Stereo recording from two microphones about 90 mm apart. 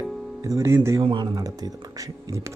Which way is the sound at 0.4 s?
35° right (ahead or behind).